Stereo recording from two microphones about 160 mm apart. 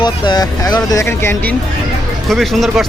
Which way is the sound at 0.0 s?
25° left (ahead or behind).